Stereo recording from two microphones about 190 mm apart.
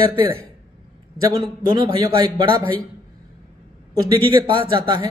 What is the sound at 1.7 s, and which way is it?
Speech, 20° right (ahead or behind).